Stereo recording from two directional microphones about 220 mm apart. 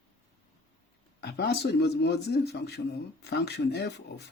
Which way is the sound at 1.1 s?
50° left (ahead or behind).